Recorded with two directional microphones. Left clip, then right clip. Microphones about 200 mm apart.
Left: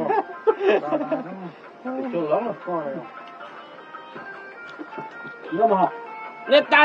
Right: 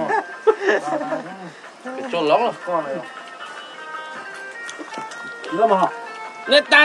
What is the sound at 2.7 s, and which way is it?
Speech, 75° right (ahead or behind).